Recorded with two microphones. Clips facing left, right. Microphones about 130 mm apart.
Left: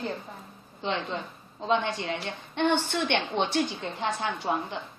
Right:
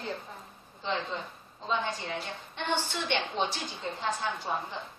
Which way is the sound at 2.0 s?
70° left (ahead or behind).